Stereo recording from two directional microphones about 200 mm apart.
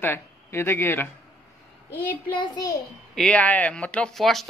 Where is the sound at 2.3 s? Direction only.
20° left (ahead or behind).